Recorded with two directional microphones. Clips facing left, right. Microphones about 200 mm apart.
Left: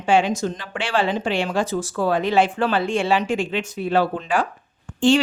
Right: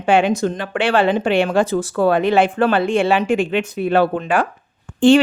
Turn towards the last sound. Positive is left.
turn(degrees=-60)  # may be behind; listen again after turning